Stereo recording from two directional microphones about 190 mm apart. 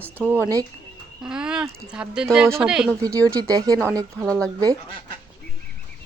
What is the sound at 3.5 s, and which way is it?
Speech, 20° right (ahead or behind).